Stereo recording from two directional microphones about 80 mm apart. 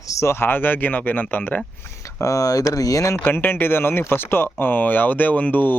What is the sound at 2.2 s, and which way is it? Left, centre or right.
Speech, left.